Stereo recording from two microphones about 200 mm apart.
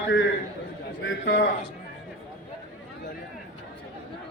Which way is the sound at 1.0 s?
65° left (ahead or behind).